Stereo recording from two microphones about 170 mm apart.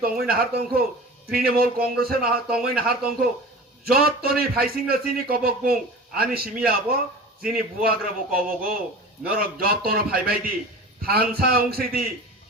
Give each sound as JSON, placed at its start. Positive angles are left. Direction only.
{"t": 0.0, "sound": "a man's voice", "side_deg": -60}
{"t": 7.8, "sound": "a man's voice", "side_deg": -60}